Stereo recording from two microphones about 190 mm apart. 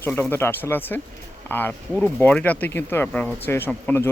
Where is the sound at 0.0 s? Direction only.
10° left (ahead or behind).